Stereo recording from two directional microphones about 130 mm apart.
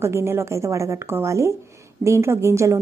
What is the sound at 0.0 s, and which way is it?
A woman's voice, 20° right (ahead or behind).